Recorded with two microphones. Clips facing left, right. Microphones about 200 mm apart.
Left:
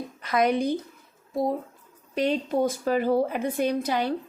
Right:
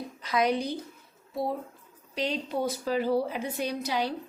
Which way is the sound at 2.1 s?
50° left (ahead or behind).